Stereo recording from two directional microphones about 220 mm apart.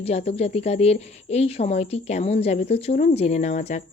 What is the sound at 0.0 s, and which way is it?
A woman's voice, 30° left (ahead or behind).